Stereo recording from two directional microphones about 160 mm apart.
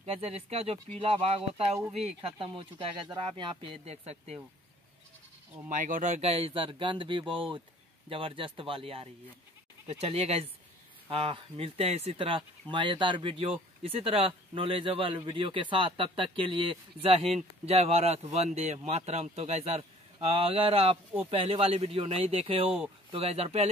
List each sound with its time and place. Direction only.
0.0 s speech: 40° right (ahead or behind)
5.7 s speech: 55° right (ahead or behind)